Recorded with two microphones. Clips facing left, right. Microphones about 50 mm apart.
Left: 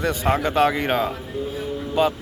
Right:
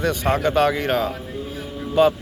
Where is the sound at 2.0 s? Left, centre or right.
Centre.